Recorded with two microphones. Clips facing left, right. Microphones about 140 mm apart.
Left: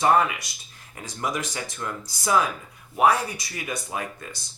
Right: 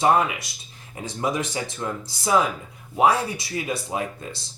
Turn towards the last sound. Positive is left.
turn(degrees=-25)  # may be behind; listen again after turning